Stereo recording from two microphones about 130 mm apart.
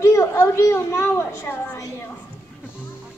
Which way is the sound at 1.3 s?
20° left (ahead or behind).